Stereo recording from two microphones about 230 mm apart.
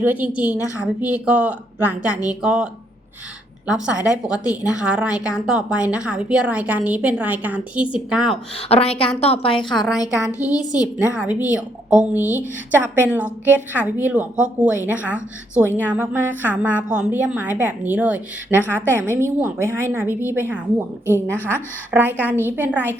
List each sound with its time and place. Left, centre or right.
0.0 s a woman's voice: centre
3.7 s a woman's voice: centre
8.7 s a woman's voice: left
9.7 s a woman's voice: centre
10.3 s a woman's voice: centre
11.1 s a woman's voice: centre